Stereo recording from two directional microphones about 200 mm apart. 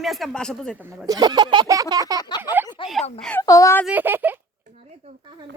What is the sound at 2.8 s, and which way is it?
Speech, 25° left (ahead or behind).